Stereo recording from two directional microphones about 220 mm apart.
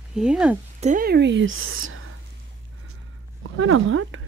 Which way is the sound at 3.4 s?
65° right (ahead or behind).